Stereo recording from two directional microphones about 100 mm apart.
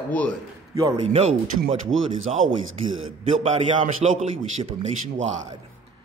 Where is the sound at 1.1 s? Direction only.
90° right.